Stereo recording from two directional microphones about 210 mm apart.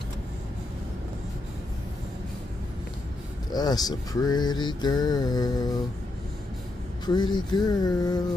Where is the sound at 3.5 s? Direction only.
20° left (ahead or behind).